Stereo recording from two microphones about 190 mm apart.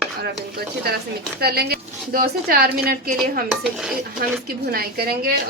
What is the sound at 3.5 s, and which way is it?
Dishes, 5° right (ahead or behind).